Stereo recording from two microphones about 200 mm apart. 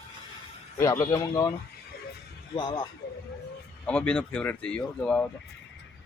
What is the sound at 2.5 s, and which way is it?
Speech, 20° left (ahead or behind).